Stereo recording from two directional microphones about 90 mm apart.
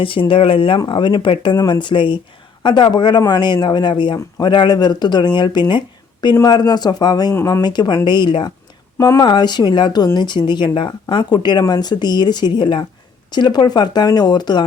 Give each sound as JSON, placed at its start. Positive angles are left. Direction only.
{"t": 0.0, "sound": "speech", "side_deg": 75}
{"t": 0.9, "sound": "speech", "side_deg": 60}
{"t": 9.0, "sound": "speech", "side_deg": 35}
{"t": 9.2, "sound": "speech", "side_deg": 55}